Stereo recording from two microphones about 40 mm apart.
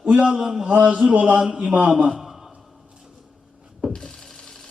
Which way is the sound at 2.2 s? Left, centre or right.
Centre.